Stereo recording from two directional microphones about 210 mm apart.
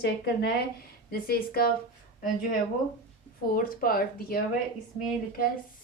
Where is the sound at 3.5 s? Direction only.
45° left (ahead or behind).